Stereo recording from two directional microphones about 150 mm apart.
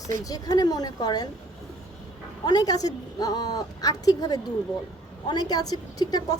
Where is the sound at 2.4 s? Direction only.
25° left (ahead or behind).